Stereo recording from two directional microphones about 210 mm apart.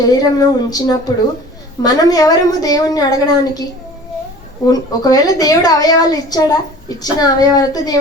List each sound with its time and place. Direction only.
0.0 s a woman's voice: 15° left (ahead or behind)
4.6 s a woman's voice: 15° left (ahead or behind)